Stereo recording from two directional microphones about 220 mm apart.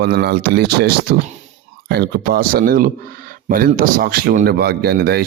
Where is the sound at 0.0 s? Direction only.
45° right (ahead or behind).